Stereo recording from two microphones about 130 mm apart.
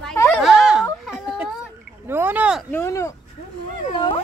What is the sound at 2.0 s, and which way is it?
Rowboat, 15° right (ahead or behind).